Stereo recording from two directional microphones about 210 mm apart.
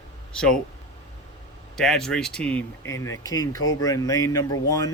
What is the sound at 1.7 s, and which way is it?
Speech, centre (ahead or behind).